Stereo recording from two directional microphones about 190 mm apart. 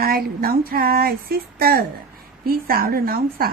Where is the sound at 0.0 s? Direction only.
50° right (ahead or behind).